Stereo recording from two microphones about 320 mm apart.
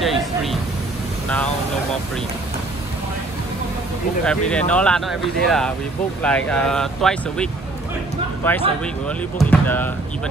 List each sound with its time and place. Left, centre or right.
0.0 s a sound: centre
4.2 s speech: centre
8.4 s speech: centre